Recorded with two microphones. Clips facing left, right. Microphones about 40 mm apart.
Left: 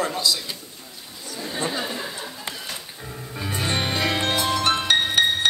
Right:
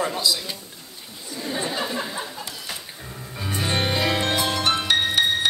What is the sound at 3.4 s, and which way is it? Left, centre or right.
Music, centre.